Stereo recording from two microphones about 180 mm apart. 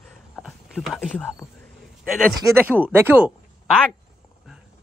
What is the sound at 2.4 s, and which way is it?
Speech, 15° right (ahead or behind).